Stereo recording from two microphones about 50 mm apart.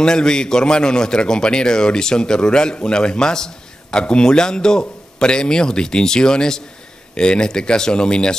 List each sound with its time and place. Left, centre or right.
0.0 s a man's voice: centre